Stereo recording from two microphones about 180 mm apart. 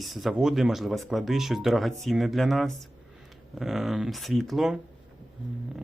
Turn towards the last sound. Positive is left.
turn(degrees=0)  # may be behind; listen again after turning